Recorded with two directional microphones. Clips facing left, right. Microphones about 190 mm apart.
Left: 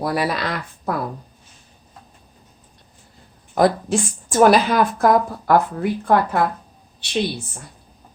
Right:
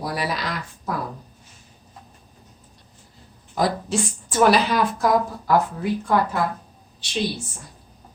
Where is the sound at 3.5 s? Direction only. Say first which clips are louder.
Left 6 dB; 50° left (ahead or behind).